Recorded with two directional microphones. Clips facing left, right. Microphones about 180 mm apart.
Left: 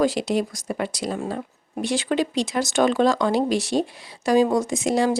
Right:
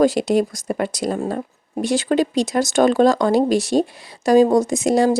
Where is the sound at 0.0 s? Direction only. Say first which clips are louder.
Right 5 dB; 45° right (ahead or behind).